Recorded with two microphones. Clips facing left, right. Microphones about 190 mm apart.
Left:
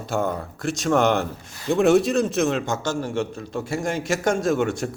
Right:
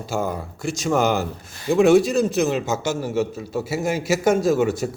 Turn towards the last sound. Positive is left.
turn(degrees=-5)  # may be behind; listen again after turning